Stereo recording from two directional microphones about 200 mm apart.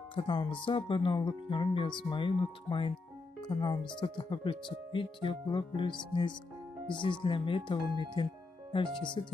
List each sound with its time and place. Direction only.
0.1 s speech: 25° left (ahead or behind)
7.9 s speech: 25° right (ahead or behind)
9.2 s speech: 20° left (ahead or behind)